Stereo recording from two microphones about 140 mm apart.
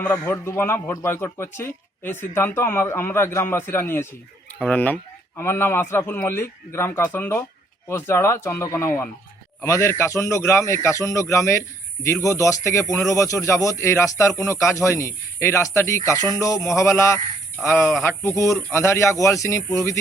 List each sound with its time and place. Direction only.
0.0 s a man's voice: 15° left (ahead or behind)